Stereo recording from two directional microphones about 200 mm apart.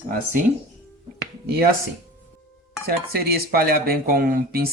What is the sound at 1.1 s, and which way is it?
Finger snapping, 50° right (ahead or behind).